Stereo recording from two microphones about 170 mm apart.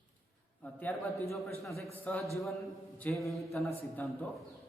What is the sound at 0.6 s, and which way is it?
Speech, 10° left (ahead or behind).